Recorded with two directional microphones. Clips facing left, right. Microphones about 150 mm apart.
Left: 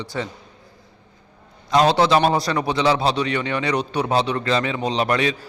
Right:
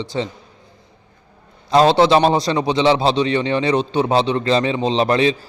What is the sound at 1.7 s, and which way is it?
A man's voice, 30° right (ahead or behind).